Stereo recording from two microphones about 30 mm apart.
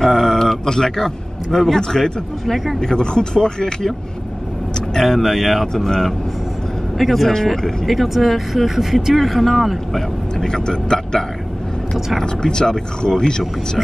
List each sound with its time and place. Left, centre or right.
0.0 s a man's voice: centre
5.0 s speech: centre
7.0 s speech: centre
10.4 s speech: left
12.4 s speech: left